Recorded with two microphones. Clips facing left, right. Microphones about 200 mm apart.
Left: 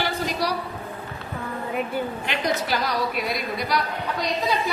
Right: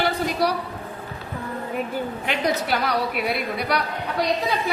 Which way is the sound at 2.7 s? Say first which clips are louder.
Right 2 dB; 60° right (ahead or behind).